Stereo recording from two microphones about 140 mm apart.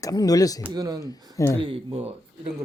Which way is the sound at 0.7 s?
30° right (ahead or behind).